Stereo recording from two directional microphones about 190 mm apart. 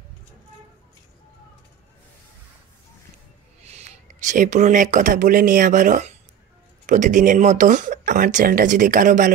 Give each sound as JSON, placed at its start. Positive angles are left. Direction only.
{"t": 3.6, "sound": "speech", "side_deg": -35}